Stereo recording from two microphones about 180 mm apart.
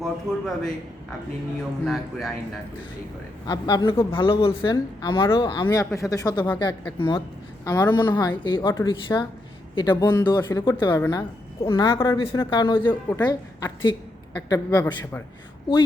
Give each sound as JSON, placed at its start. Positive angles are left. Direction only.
{"t": 0.0, "sound": "a man's voice", "side_deg": 0}
{"t": 1.8, "sound": "a man's voice", "side_deg": 0}
{"t": 3.4, "sound": "a woman's voice", "side_deg": 20}
{"t": 5.6, "sound": "a man's voice", "side_deg": 15}